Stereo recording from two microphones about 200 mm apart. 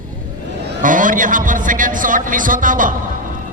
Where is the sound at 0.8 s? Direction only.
40° right (ahead or behind).